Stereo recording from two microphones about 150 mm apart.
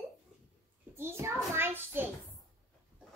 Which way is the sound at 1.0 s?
15° right (ahead or behind).